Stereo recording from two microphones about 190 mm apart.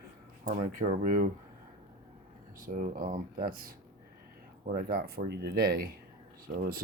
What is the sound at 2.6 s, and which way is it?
Speech, 45° right (ahead or behind).